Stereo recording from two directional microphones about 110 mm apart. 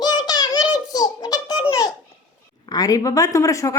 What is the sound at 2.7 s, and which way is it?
A woman's voice, 35° left (ahead or behind).